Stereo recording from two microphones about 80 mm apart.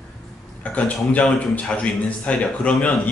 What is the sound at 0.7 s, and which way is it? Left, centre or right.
A man's voice, centre.